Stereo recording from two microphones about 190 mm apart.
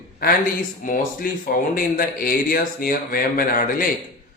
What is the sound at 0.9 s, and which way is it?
Speech, 45° left (ahead or behind).